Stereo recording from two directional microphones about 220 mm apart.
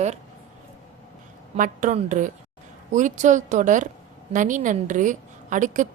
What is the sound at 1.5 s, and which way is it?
A woman's voice, 35° right (ahead or behind).